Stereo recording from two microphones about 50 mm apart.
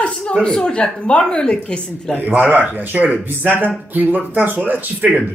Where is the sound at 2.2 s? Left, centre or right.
Right.